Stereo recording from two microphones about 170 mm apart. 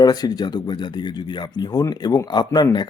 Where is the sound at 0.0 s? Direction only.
20° left (ahead or behind).